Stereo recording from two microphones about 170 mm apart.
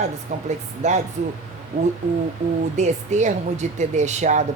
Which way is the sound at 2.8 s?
45° right (ahead or behind).